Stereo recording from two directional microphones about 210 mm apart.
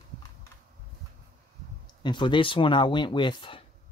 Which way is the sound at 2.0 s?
25° left (ahead or behind).